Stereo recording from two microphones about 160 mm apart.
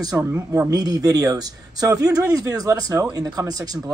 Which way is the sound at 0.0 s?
20° right (ahead or behind).